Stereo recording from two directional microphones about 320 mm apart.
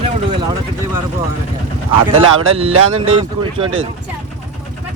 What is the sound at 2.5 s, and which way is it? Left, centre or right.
Speech, centre.